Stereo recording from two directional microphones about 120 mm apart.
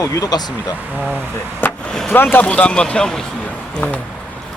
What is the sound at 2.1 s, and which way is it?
A man's voice, 15° left (ahead or behind).